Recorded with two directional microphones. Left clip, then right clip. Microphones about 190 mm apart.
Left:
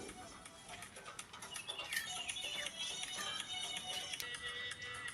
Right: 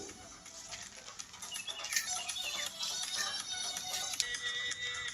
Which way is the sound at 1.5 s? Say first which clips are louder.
Right 5 dB; 10° right (ahead or behind).